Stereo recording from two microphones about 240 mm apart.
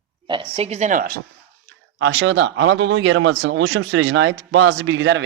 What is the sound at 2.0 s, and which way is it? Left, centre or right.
Speech, right.